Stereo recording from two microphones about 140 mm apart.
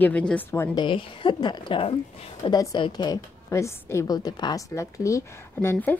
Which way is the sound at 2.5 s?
30° left (ahead or behind).